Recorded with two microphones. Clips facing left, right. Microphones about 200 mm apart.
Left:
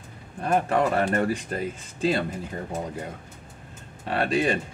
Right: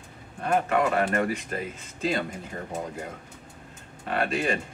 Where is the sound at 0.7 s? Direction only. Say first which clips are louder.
Left 1 dB; 30° left (ahead or behind).